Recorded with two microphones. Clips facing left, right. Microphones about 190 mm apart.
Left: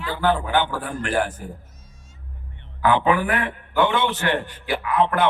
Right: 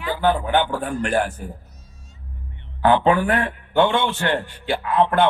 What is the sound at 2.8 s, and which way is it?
A man's voice, 30° right (ahead or behind).